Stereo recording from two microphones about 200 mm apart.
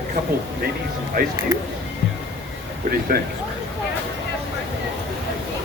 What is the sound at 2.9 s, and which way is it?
Speech, 45° right (ahead or behind).